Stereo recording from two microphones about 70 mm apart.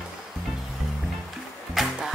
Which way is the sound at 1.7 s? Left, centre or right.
Centre.